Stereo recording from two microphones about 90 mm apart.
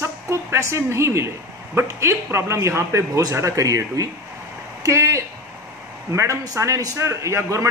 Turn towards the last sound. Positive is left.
turn(degrees=-35)  # may be behind; listen again after turning